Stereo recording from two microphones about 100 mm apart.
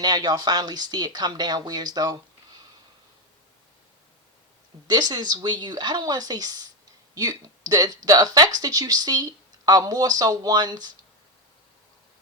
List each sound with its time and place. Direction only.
0.0 s speech: 45° right (ahead or behind)
4.9 s speech: 45° right (ahead or behind)